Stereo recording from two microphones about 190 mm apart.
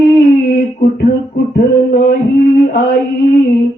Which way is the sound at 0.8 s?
60° left (ahead or behind).